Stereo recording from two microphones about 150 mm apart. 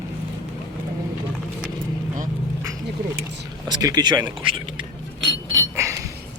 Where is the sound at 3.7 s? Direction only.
25° right (ahead or behind).